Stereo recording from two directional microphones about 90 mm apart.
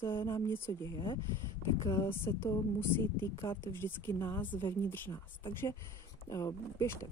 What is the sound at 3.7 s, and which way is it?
Speech, 25° left (ahead or behind).